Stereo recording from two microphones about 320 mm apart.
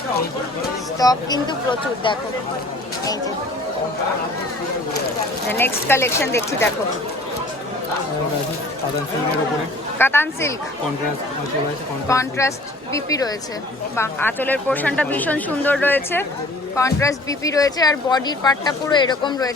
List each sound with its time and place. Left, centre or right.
0.9 s speech: centre
5.5 s speech: centre
10.0 s speech: centre
12.0 s speech: centre